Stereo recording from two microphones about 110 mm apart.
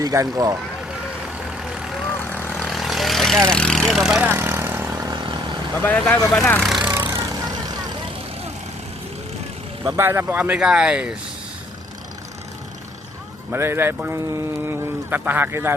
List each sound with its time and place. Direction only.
0.0 s speech: 30° right (ahead or behind)
1.5 s vehicle: 5° right (ahead or behind)
2.1 s vehicle: 15° left (ahead or behind)
2.6 s vehicle: centre (ahead or behind)
4.2 s vehicle: 20° right (ahead or behind)
5.8 s speech: 15° left (ahead or behind); by 6.8 s centre (ahead or behind)
7.1 s vehicle: 35° right (ahead or behind)
10.0 s speech: 20° right (ahead or behind)
13.5 s speech: 20° right (ahead or behind)